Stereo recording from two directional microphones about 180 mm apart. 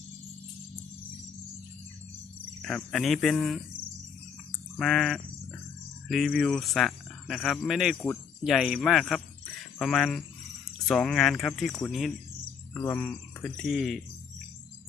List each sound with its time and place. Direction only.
2.6 s speech: 5° left (ahead or behind)
4.8 s speech: centre (ahead or behind)